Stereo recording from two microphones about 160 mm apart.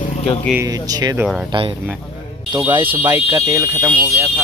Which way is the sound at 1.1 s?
5° right (ahead or behind).